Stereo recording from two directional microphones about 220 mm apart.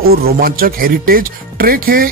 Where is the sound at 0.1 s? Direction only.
45° right (ahead or behind).